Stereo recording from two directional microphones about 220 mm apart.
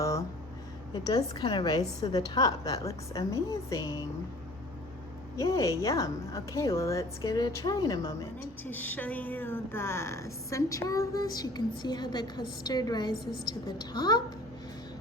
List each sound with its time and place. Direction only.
0.0 s a sound: 15° left (ahead or behind)
0.9 s a woman's voice: 20° left (ahead or behind)
5.4 s a woman's voice: 15° left (ahead or behind)